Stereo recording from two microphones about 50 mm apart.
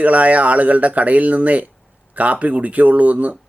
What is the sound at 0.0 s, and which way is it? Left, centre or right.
Speech, right.